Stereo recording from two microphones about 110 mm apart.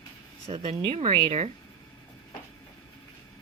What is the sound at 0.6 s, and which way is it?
Speech, 55° right (ahead or behind).